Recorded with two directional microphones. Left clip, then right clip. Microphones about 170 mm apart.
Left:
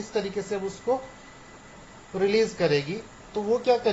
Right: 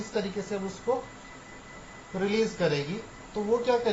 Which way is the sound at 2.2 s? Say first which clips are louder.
Left 4 dB; 65° left (ahead or behind).